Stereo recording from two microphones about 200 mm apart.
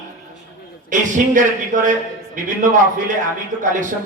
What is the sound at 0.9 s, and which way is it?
Speech, 40° right (ahead or behind).